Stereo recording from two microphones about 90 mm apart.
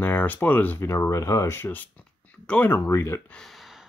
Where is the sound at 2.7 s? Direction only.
30° left (ahead or behind).